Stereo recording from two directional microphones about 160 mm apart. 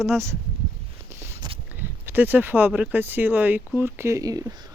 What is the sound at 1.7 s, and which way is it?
Speech, 10° right (ahead or behind).